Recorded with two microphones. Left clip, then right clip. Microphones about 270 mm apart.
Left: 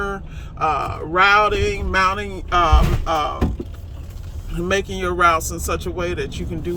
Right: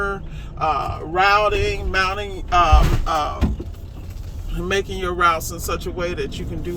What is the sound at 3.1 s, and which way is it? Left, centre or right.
Speech, centre.